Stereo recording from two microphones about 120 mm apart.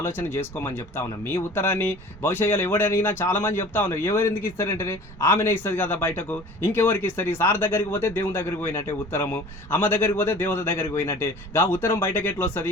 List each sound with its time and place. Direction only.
0.0 s speech: 20° left (ahead or behind)